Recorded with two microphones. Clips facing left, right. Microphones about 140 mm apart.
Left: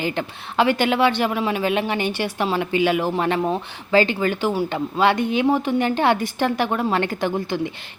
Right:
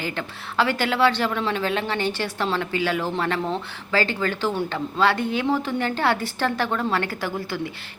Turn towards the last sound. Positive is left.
turn(degrees=20)  # may be behind; listen again after turning